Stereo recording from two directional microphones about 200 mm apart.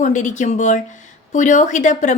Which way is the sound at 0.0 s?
40° left (ahead or behind).